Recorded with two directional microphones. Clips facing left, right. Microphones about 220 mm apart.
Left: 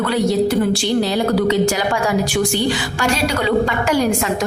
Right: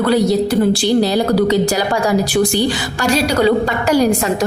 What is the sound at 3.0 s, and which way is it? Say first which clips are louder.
A woman's voice: right 5 dB; 35° right (ahead or behind).